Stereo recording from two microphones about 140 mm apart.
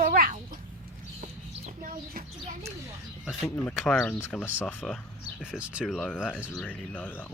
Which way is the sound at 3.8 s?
Centre (ahead or behind).